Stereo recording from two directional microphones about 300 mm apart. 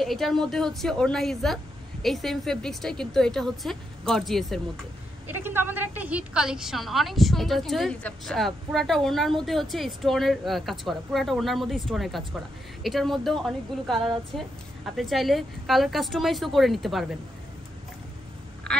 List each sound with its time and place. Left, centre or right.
0.0 s a woman's voice: centre
13.9 s a woman's voice: centre
15.0 s a woman's voice: centre
18.7 s quack: centre